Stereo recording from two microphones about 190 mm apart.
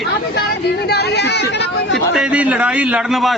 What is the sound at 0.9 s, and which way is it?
Speech, 60° left (ahead or behind).